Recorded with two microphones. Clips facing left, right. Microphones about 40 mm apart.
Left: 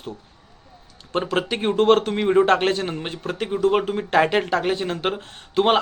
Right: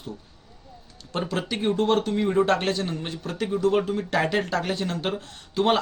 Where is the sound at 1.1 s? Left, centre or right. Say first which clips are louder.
Left 5 dB; left.